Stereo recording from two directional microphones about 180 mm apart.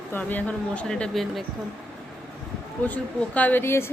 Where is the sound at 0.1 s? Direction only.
10° left (ahead or behind).